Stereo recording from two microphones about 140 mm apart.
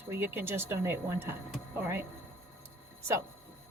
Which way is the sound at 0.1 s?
15° right (ahead or behind).